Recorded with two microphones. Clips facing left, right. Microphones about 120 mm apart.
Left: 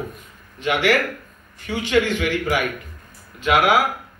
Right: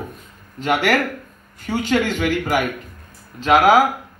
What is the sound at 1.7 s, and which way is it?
Speech, 45° right (ahead or behind).